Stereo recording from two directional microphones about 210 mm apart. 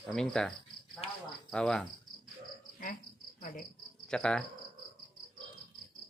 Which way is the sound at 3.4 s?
40° left (ahead or behind).